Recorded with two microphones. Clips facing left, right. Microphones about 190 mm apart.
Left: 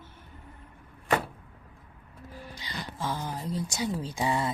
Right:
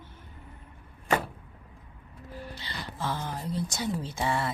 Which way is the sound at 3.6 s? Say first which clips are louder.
Even; 10° left (ahead or behind).